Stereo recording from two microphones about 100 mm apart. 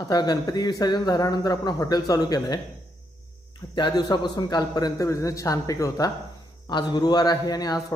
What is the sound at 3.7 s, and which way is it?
Speech, 45° left (ahead or behind).